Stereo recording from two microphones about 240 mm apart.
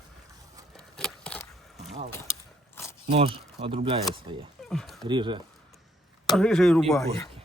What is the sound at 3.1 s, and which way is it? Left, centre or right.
Speech, right.